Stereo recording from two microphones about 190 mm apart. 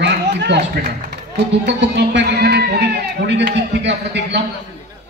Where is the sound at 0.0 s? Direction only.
65° right (ahead or behind).